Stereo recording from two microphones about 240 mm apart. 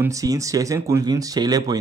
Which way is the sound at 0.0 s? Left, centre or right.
Centre.